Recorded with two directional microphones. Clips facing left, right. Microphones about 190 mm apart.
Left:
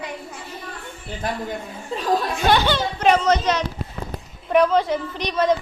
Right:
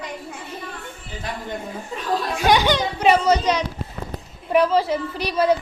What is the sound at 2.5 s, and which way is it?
A child's voice, 15° right (ahead or behind).